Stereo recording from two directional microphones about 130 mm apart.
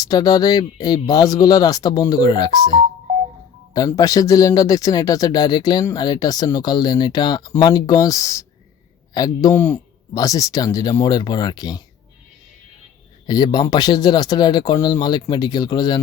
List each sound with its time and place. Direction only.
0.0 s speech: 30° left (ahead or behind)
9.6 s speech: 15° left (ahead or behind)
10.2 s speech: 25° left (ahead or behind)
13.2 s speech: 35° left (ahead or behind)